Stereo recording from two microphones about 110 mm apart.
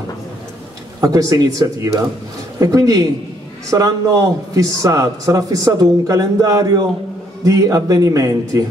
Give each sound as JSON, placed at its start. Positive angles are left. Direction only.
{"t": 1.0, "sound": "a man's voice", "side_deg": -30}